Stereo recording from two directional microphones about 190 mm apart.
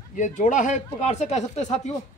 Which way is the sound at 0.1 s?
40° left (ahead or behind).